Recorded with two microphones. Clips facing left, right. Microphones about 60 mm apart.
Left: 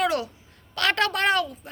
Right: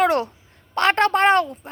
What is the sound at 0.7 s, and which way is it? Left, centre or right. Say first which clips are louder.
Speech: right 6 dB; right.